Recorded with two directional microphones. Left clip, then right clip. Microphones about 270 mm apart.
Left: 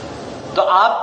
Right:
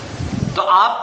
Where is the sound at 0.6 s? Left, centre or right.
Centre.